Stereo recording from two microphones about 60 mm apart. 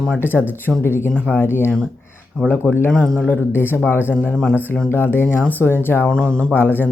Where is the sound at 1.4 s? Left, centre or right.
Left.